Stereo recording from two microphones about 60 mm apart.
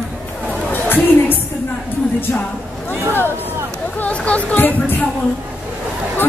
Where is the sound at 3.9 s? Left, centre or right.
Left.